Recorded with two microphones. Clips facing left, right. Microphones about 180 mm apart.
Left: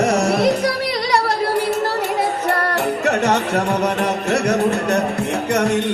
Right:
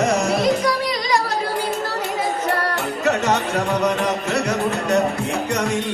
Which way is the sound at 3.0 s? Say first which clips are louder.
Even; 65° left (ahead or behind).